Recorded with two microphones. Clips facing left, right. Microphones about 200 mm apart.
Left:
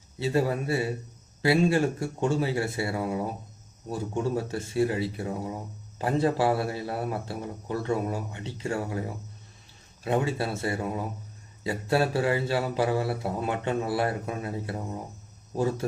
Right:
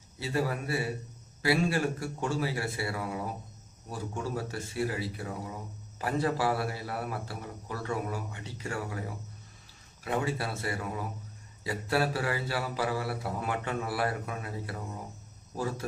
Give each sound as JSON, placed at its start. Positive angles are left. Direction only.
{"t": 0.2, "sound": "a man's voice", "side_deg": 25}